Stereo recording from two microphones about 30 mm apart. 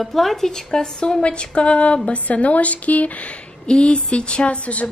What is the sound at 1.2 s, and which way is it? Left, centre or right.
A woman's voice, left.